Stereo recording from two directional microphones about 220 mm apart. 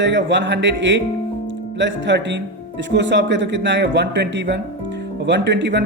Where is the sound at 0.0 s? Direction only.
55° right (ahead or behind).